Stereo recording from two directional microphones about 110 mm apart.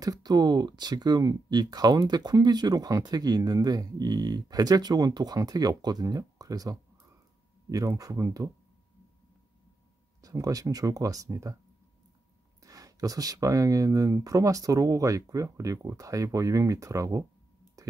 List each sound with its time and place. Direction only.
0.0 s speech: 35° right (ahead or behind)
10.2 s speech: 30° right (ahead or behind)
12.6 s speech: 30° right (ahead or behind)
17.8 s clicking: 30° right (ahead or behind)